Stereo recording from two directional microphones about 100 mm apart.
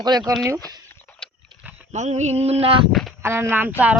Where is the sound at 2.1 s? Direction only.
90° right; by 2.8 s 70° right (ahead or behind).